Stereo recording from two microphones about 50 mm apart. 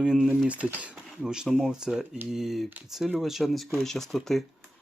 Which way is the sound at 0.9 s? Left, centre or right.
Centre.